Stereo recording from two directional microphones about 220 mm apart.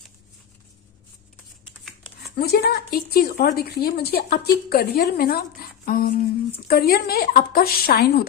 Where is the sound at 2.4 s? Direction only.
45° left (ahead or behind).